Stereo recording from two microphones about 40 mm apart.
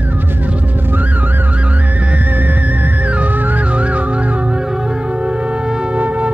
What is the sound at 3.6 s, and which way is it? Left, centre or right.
Music, right.